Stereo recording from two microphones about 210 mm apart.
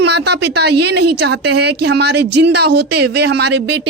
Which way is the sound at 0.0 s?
55° right (ahead or behind).